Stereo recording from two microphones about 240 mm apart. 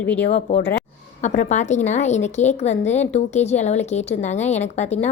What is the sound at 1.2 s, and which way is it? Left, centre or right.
A woman's voice, left.